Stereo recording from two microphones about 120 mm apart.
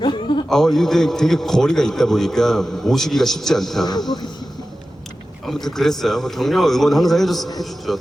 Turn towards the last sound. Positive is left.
turn(degrees=0)  # may be behind; listen again after turning